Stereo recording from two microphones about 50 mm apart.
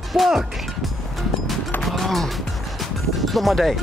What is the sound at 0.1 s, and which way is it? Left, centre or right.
Speech, centre.